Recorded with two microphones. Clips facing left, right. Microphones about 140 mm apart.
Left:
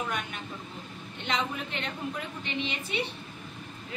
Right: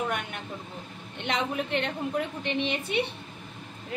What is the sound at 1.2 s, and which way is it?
Speech, 60° right (ahead or behind).